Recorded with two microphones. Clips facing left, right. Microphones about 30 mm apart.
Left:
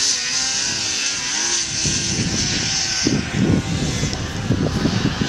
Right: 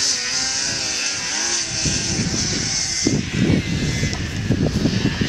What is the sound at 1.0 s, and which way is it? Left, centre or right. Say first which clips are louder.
Vehicle: left 1 dB; centre.